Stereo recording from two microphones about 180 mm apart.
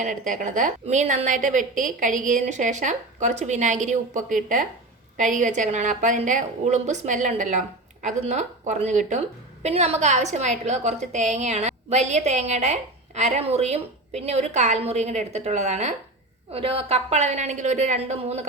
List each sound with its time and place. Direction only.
0.0 s a woman's voice: 45° right (ahead or behind)